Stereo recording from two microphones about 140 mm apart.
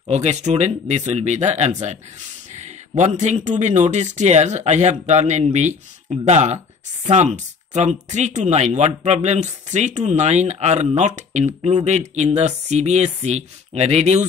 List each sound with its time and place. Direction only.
0.1 s speech: 55° right (ahead or behind)